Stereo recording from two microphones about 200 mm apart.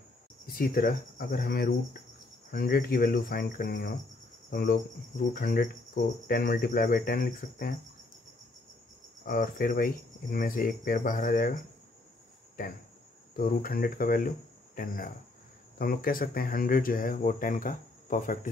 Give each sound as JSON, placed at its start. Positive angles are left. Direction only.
{"t": 0.5, "sound": "speech", "side_deg": 45}
{"t": 9.2, "sound": "speech", "side_deg": 45}
{"t": 13.4, "sound": "speech", "side_deg": 45}
{"t": 15.8, "sound": "speech", "side_deg": 45}